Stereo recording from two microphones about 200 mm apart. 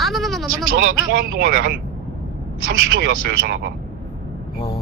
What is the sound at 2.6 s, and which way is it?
Speech, 50° right (ahead or behind).